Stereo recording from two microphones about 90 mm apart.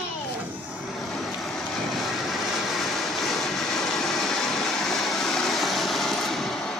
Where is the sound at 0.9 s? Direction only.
Centre (ahead or behind).